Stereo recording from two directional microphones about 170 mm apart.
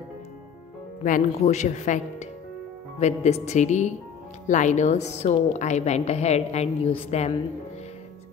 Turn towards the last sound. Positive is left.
turn(degrees=35)  # may be behind; listen again after turning